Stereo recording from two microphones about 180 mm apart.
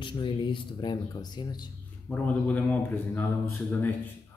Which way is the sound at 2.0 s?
10° left (ahead or behind).